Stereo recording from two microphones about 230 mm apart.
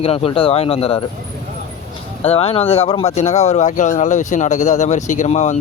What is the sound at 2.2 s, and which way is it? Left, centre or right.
Speech, left.